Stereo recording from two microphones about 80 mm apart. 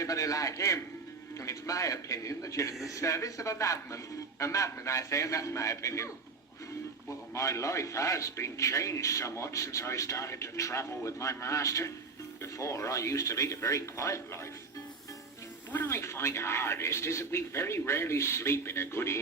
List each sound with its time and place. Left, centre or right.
0.0 s a man's voice: left
7.3 s a man's voice: left
15.7 s a man's voice: left